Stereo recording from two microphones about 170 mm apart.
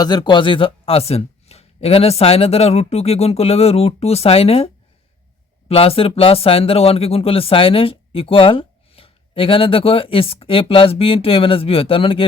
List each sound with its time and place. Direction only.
0.0 s speech: 25° left (ahead or behind)